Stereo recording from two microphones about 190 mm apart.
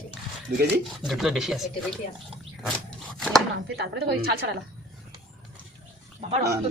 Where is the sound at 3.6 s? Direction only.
60° right (ahead or behind).